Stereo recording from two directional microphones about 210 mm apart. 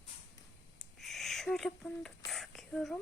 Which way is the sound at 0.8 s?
Centre (ahead or behind).